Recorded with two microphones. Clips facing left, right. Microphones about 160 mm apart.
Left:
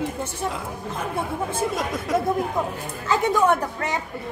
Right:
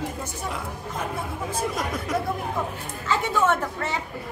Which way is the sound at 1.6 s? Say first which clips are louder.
Even; 25° left (ahead or behind).